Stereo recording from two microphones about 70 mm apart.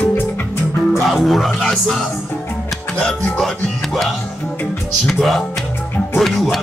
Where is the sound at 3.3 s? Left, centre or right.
Centre.